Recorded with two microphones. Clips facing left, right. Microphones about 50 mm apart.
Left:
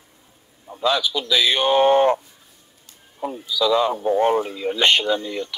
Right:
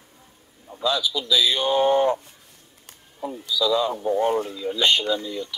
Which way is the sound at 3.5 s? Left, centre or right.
Left.